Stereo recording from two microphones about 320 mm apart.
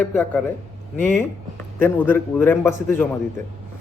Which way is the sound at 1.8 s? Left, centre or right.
Centre.